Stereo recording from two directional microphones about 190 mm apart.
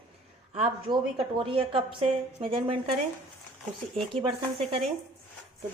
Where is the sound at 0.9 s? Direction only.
25° right (ahead or behind).